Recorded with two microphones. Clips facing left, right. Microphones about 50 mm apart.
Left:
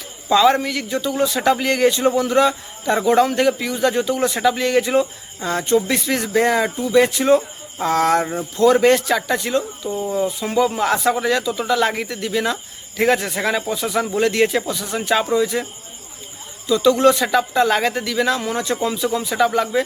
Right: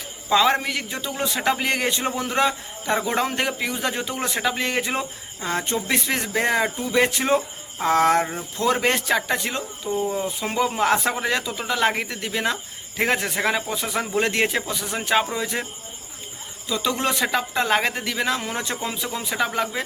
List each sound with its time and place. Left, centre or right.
0.3 s a man's voice: centre
9.9 s speech: centre
10.4 s a man's voice: right
13.2 s speech: centre
16.6 s speech: centre